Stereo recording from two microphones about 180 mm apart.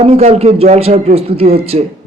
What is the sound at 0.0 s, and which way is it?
A man's voice, 35° right (ahead or behind).